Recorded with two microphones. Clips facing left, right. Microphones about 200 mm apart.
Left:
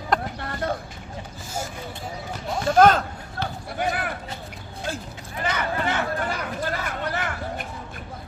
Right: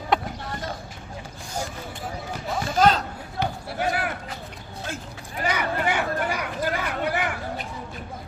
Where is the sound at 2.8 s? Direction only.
55° left (ahead or behind).